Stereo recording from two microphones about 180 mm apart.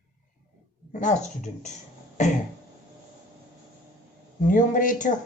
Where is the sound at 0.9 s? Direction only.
45° left (ahead or behind).